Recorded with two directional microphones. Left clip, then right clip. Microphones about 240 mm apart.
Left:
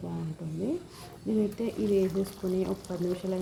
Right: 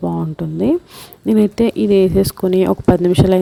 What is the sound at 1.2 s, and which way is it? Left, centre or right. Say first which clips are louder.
A woman's voice: right 16 dB; right.